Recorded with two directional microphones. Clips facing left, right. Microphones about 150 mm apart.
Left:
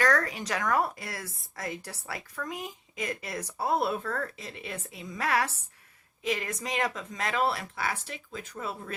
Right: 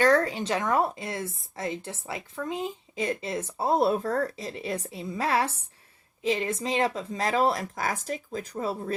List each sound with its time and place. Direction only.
0.0 s a woman's voice: 30° right (ahead or behind)